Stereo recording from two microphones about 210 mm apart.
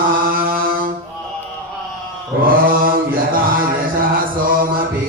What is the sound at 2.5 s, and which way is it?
Mantra, 40° right (ahead or behind).